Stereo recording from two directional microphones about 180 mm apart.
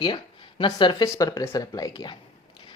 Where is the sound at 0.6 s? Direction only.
25° left (ahead or behind).